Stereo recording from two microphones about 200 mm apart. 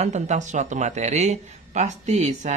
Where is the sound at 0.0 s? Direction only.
35° right (ahead or behind).